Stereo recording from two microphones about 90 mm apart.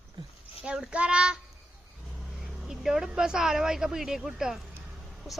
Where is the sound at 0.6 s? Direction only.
10° right (ahead or behind).